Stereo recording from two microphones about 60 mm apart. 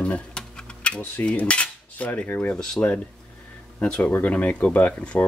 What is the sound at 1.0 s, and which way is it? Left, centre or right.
Cutlery, left.